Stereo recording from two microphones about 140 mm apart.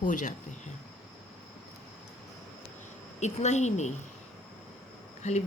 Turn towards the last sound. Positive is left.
turn(degrees=55)  # may be behind; listen again after turning